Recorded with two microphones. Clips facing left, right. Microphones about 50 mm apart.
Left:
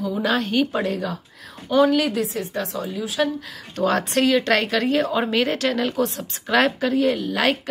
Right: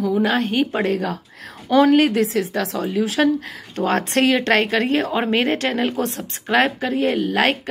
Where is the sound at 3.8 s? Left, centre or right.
Right.